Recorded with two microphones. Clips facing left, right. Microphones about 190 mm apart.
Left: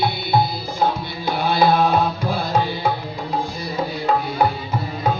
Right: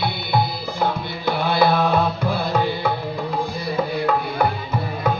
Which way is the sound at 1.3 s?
55° right (ahead or behind).